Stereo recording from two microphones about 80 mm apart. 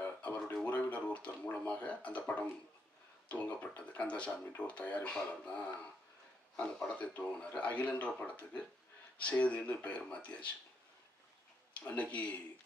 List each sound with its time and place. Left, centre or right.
0.0 s a sound: left
4.6 s speech: centre
11.7 s speech: centre